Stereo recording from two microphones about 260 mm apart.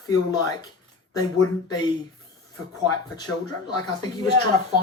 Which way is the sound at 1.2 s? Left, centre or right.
Centre.